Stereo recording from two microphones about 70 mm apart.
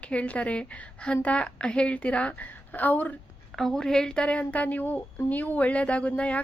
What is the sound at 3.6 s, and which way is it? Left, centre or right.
Speech, centre.